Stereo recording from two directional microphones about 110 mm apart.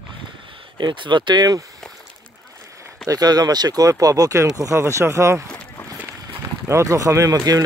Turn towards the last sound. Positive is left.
turn(degrees=-35)  # may be behind; listen again after turning